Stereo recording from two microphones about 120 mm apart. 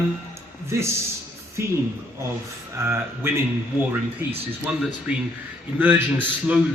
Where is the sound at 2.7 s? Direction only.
20° right (ahead or behind).